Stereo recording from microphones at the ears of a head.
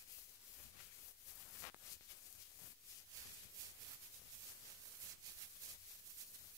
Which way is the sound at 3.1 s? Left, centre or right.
Right.